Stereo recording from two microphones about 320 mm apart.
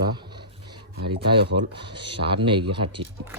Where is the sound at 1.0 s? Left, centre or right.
Right.